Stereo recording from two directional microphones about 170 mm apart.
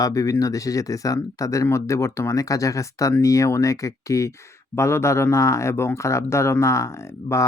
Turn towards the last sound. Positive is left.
turn(degrees=15)  # may be behind; listen again after turning